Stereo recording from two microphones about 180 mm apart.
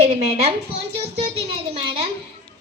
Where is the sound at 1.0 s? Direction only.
35° right (ahead or behind).